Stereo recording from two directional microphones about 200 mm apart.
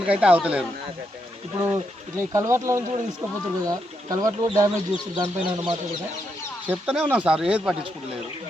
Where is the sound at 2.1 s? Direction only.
15° right (ahead or behind).